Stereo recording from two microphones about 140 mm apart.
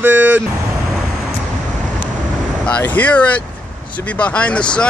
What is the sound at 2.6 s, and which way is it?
Speech, 10° left (ahead or behind).